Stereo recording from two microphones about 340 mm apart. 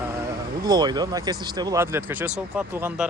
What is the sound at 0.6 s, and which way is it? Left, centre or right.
Speech, centre.